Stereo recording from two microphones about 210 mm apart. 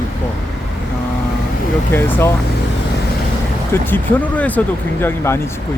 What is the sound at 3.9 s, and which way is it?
Speech, 5° left (ahead or behind).